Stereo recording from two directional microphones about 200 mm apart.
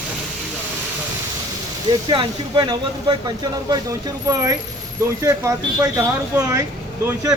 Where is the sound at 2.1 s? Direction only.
25° right (ahead or behind).